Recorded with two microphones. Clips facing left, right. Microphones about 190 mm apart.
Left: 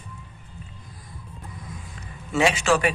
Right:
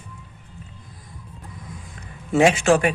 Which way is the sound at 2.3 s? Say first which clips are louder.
Right 5 dB; 50° right (ahead or behind).